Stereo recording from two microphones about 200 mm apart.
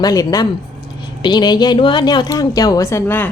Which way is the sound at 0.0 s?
20° left (ahead or behind).